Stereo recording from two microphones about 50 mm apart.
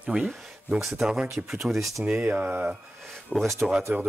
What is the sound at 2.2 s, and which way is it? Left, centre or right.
Speech, right.